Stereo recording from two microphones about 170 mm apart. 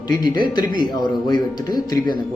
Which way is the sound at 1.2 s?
25° left (ahead or behind).